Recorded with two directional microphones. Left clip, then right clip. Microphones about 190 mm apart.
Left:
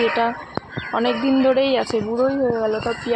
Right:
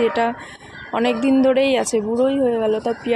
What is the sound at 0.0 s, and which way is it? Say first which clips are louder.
Speech: even; 30° right (ahead or behind).